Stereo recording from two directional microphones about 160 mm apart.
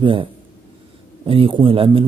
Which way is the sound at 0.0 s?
30° right (ahead or behind).